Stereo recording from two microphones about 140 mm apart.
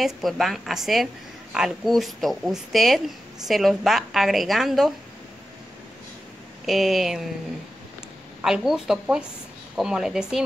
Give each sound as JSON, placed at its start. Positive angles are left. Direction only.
{"t": 0.0, "sound": "a woman's voice", "side_deg": 0}
{"t": 6.6, "sound": "a woman's voice", "side_deg": 0}
{"t": 8.4, "sound": "a woman's voice", "side_deg": -5}